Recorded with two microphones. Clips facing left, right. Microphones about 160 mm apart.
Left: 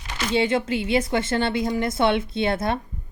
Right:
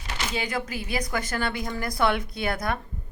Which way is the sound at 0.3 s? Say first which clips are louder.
Left 10 dB; 25° left (ahead or behind).